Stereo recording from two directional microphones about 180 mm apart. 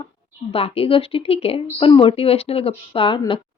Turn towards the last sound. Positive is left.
turn(degrees=30)  # may be behind; listen again after turning